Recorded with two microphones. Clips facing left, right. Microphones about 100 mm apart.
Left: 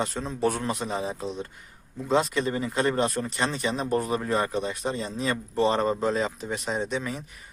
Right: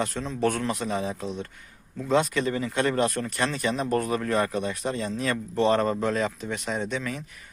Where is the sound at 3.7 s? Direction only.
25° left (ahead or behind).